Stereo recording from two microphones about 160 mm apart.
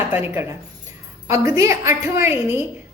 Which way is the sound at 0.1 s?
15° right (ahead or behind).